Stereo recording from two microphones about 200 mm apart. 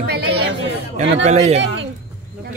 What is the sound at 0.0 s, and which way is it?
Chatter, 55° right (ahead or behind).